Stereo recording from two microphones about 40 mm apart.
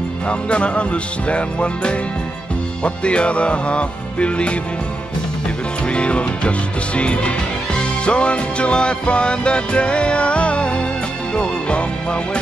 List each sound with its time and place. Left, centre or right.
0.3 s music: left
5.9 s music: left